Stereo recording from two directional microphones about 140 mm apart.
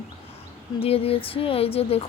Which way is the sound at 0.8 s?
45° left (ahead or behind).